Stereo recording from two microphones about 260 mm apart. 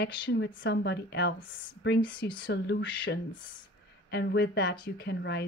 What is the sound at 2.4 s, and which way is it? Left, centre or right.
Speech, left.